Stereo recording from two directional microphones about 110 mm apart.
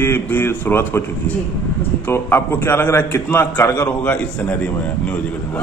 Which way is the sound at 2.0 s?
20° left (ahead or behind).